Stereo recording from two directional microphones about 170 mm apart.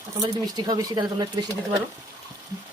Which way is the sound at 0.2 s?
25° right (ahead or behind).